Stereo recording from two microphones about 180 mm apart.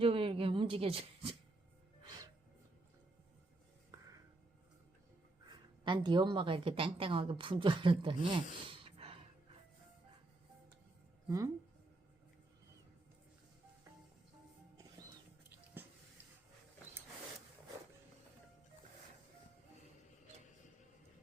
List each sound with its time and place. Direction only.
0.0 s a sound: 30° right (ahead or behind)
2.0 s music: 25° right (ahead or behind)
5.5 s a woman's voice: 25° right (ahead or behind)
11.3 s speech: 20° right (ahead or behind)